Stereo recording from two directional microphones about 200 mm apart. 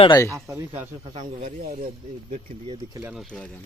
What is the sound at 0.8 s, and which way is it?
Speech, 30° right (ahead or behind).